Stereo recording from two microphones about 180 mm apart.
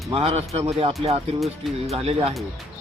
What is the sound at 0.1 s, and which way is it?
Speech, 35° right (ahead or behind).